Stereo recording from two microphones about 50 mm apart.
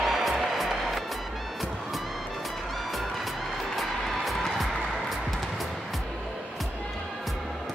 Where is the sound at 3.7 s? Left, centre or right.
Centre.